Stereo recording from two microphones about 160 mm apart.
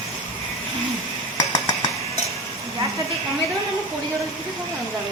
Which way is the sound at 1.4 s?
20° left (ahead or behind).